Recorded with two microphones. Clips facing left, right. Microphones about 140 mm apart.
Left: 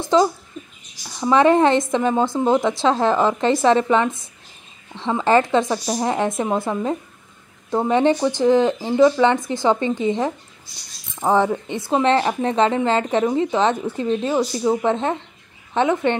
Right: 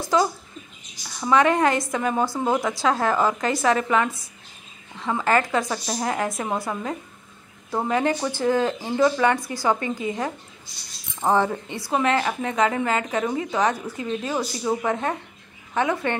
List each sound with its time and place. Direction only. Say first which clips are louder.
0.0 s speech: left 5 dB; 25° left (ahead or behind)
8.9 s speech: left 6 dB; 10° left (ahead or behind)
9.2 s speech: left 4 dB; 20° left (ahead or behind)
11.1 s speech: left 3 dB; 15° left (ahead or behind); by 14.3 s 30° left (ahead or behind)
14.3 s speech: left 4 dB; 20° left (ahead or behind)